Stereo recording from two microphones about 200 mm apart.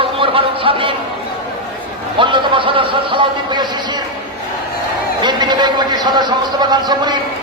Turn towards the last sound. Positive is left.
turn(degrees=-20)  # may be behind; listen again after turning